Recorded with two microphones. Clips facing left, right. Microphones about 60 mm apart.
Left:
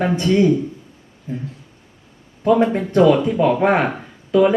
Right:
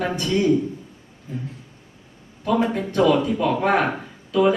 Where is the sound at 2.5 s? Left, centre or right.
Left.